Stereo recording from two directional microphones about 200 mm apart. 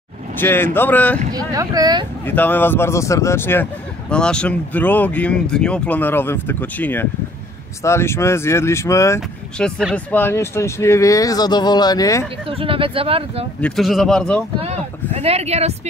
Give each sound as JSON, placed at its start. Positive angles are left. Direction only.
{"t": 0.4, "sound": "speech", "side_deg": 10}
{"t": 1.3, "sound": "speech", "side_deg": -15}
{"t": 2.2, "sound": "speech", "side_deg": 10}
{"t": 9.6, "sound": "speech", "side_deg": 5}
{"t": 12.4, "sound": "speech", "side_deg": -25}
{"t": 13.6, "sound": "speech", "side_deg": 5}
{"t": 15.1, "sound": "speech", "side_deg": -30}